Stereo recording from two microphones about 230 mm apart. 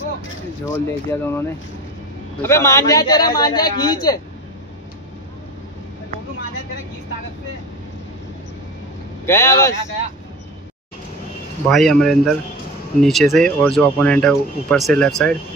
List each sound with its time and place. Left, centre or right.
0.7 s a woman's voice: centre
9.2 s a woman's voice: centre
11.7 s speech: centre